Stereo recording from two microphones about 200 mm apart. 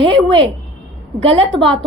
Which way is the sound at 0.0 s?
25° right (ahead or behind).